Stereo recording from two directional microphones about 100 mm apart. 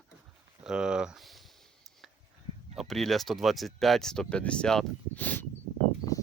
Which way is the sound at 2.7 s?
Centre (ahead or behind).